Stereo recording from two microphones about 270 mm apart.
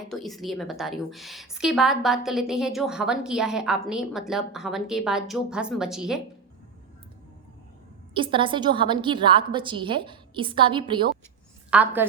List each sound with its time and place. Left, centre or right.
0.1 s a woman's voice: centre
8.1 s a woman's voice: centre
11.7 s a woman's voice: centre